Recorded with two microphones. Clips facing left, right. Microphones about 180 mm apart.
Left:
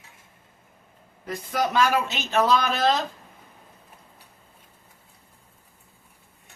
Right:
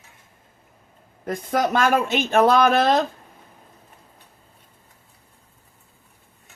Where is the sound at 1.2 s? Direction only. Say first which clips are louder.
Right 4 dB; 50° right (ahead or behind).